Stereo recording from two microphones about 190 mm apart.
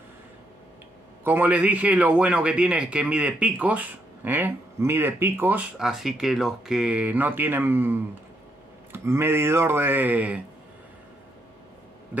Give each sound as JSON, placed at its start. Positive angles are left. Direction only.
{"t": 1.2, "sound": "a man's voice", "side_deg": -10}